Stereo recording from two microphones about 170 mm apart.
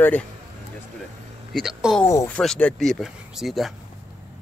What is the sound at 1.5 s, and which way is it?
Speech, centre (ahead or behind).